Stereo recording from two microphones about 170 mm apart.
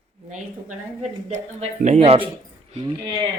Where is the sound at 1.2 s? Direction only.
40° right (ahead or behind).